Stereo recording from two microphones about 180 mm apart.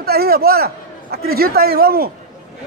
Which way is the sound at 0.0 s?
60° right (ahead or behind).